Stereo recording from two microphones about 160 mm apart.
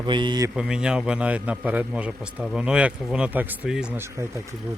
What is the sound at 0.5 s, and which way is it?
A man's voice, 5° right (ahead or behind).